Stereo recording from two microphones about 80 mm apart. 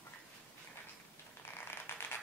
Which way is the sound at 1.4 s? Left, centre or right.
Left.